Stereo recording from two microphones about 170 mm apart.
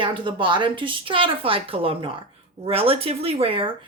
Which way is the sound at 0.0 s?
30° right (ahead or behind).